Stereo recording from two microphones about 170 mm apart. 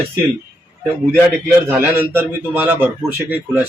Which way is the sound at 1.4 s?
10° right (ahead or behind).